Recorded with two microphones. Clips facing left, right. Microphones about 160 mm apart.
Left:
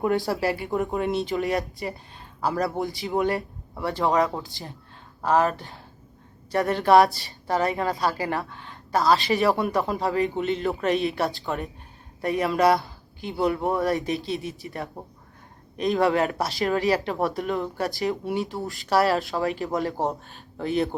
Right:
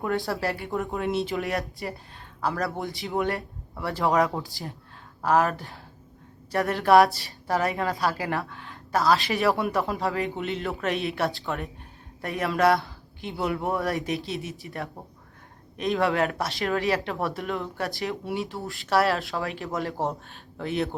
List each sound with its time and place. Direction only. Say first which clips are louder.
0.4 s a woman's voice: left 3 dB; 5° left (ahead or behind)